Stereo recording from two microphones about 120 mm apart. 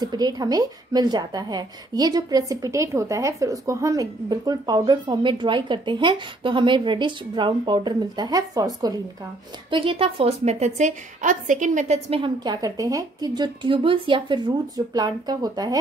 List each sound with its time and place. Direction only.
0.0 s a woman's voice: 35° right (ahead or behind)
9.7 s a woman's voice: 45° right (ahead or behind); by 12.0 s 85° right
12.4 s a woman's voice: 30° right (ahead or behind)
15.0 s a woman's voice: 35° right (ahead or behind)